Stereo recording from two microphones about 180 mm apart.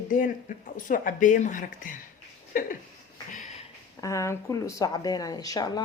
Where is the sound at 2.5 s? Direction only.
50° left (ahead or behind).